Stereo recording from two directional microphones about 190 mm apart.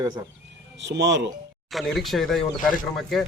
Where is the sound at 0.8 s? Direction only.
65° right (ahead or behind).